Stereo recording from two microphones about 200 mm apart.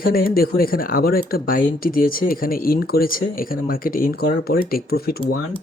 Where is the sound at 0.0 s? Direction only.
45° left (ahead or behind).